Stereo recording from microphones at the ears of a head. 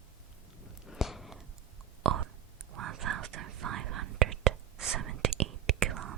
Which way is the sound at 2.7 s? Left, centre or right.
Right.